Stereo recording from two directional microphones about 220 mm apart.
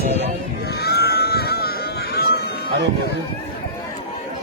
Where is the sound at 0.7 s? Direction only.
45° left (ahead or behind).